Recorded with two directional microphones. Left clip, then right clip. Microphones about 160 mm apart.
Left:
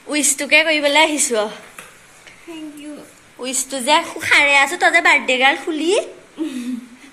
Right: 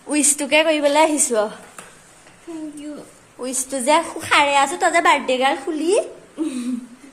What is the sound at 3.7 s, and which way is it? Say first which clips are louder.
Speech: left 1 dB; 25° right (ahead or behind).